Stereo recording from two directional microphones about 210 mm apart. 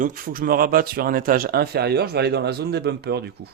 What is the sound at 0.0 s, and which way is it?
Speech, 40° right (ahead or behind).